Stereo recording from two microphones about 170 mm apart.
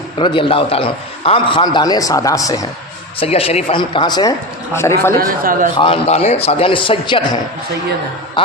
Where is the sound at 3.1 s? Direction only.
35° left (ahead or behind); by 4.9 s 15° left (ahead or behind).